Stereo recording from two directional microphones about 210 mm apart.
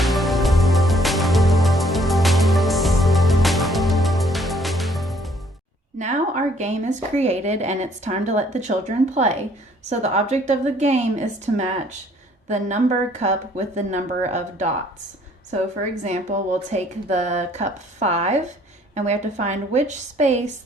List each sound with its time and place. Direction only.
0.0 s music: centre (ahead or behind)
6.0 s speech: 35° right (ahead or behind)